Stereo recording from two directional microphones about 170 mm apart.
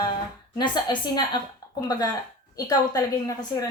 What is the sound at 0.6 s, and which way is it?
Speech, 25° left (ahead or behind).